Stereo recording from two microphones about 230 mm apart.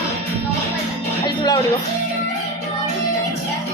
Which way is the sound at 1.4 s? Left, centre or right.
Centre.